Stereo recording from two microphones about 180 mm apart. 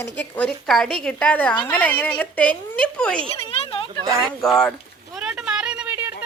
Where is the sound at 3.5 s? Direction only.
30° left (ahead or behind).